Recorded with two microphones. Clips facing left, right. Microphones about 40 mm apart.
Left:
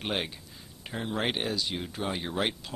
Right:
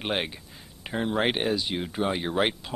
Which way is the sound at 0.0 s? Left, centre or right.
Centre.